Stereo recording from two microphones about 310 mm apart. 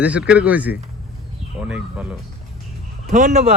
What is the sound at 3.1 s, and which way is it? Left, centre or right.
Speech, right.